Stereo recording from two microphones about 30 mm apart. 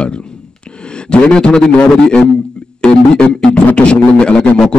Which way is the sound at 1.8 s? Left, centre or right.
Left.